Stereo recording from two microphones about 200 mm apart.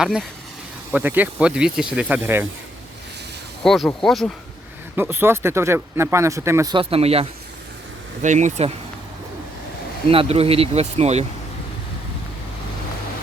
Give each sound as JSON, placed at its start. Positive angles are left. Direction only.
{"t": 0.0, "sound": "speech", "side_deg": 0}
{"t": 3.6, "sound": "speech", "side_deg": 0}
{"t": 4.9, "sound": "speech", "side_deg": -10}
{"t": 10.1, "sound": "speech", "side_deg": -30}